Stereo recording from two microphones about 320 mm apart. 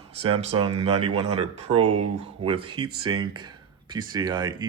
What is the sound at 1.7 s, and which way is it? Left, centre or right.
Speech, right.